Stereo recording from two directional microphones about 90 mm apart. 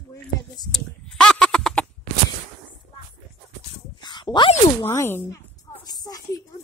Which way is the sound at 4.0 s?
55° left (ahead or behind).